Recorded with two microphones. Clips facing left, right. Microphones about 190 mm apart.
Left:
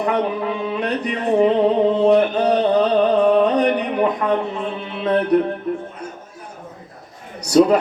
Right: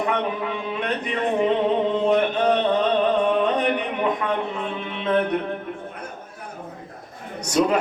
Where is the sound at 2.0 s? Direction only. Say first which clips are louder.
Left 5 dB; 35° left (ahead or behind).